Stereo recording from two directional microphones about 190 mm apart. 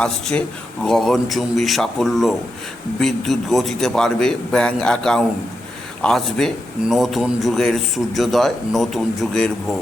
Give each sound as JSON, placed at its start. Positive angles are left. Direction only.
{"t": 0.0, "sound": "speech", "side_deg": 5}